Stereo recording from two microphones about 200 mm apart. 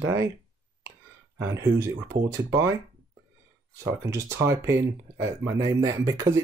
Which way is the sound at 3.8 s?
15° right (ahead or behind).